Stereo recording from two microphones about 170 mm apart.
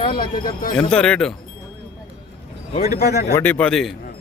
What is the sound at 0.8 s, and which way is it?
Speech, 5° left (ahead or behind).